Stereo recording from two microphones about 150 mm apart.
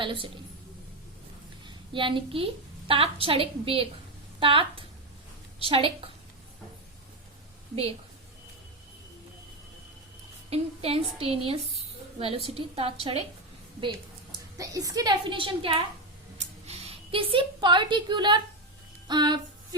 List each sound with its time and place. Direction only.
0.0 s a woman's voice: 35° right (ahead or behind)
1.6 s a woman's voice: 35° right (ahead or behind)
10.5 s a woman's voice: 40° right (ahead or behind)
12.5 s a woman's voice: 40° right (ahead or behind)
14.3 s a woman's voice: 20° right (ahead or behind)
15.3 s a woman's voice: 35° right (ahead or behind)